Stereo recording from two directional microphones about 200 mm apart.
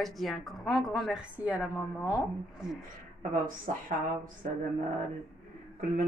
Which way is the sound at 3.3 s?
40° right (ahead or behind).